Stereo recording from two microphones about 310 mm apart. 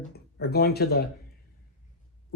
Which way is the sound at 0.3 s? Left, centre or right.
Left.